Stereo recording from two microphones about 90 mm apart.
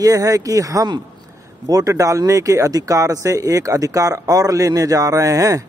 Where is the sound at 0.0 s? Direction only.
40° right (ahead or behind).